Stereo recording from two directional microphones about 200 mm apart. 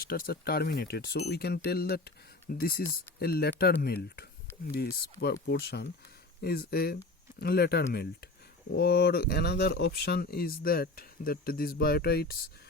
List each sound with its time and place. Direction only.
0.0 s speech: 50° left (ahead or behind)